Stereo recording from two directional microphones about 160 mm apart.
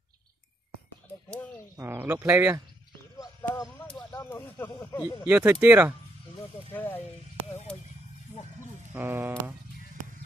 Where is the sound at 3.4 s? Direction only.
15° left (ahead or behind).